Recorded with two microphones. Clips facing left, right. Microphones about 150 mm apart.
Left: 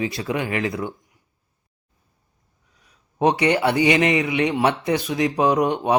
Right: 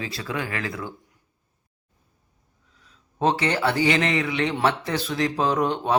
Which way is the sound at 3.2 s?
15° left (ahead or behind).